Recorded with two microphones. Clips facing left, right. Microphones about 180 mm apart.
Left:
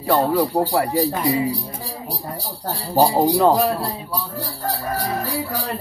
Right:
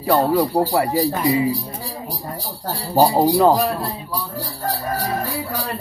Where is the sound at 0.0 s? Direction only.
5° right (ahead or behind).